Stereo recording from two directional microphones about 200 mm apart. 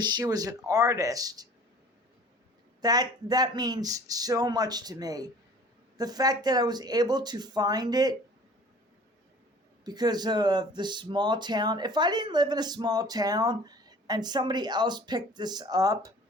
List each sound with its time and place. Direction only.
0.0 s speech: 20° right (ahead or behind)
2.8 s speech: 20° right (ahead or behind)
9.8 s speech: 20° right (ahead or behind)